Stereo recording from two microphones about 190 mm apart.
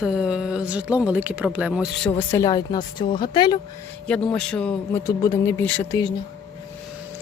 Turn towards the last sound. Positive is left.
turn(degrees=10)  # may be behind; listen again after turning